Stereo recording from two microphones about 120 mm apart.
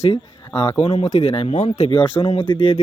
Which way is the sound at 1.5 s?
90° left.